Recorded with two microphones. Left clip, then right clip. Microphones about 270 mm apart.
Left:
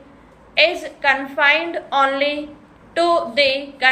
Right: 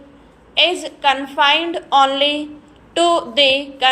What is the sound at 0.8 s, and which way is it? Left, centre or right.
A woman's voice, centre.